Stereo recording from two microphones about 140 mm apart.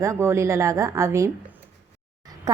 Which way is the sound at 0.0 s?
20° right (ahead or behind).